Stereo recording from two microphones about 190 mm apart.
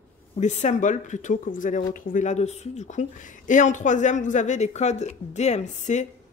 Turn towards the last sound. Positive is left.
turn(degrees=40)  # may be behind; listen again after turning